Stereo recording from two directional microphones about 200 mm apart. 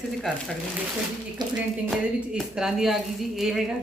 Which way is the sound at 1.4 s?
20° right (ahead or behind).